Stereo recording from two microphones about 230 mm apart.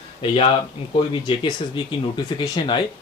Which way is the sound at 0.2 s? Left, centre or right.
Left.